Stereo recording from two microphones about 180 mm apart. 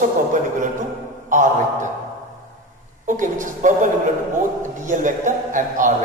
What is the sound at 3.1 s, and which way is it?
A man's voice, 45° right (ahead or behind).